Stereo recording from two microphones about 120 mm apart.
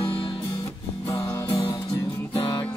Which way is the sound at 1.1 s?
25° left (ahead or behind).